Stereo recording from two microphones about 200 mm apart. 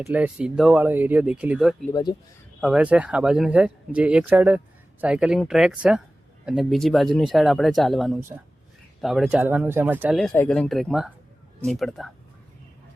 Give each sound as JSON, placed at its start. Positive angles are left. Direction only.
{"t": 0.0, "sound": "speech", "side_deg": -10}
{"t": 1.9, "sound": "speech", "side_deg": 20}
{"t": 2.6, "sound": "speech", "side_deg": -5}